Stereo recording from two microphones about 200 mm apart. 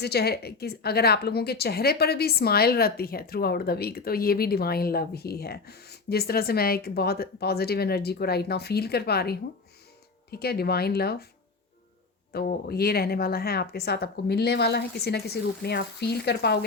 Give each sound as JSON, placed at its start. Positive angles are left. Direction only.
{"t": 0.0, "sound": "a woman's voice", "side_deg": 55}
{"t": 12.3, "sound": "a woman's voice", "side_deg": 50}